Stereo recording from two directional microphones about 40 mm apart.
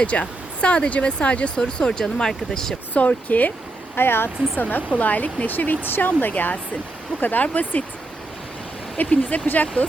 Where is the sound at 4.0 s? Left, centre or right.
Left.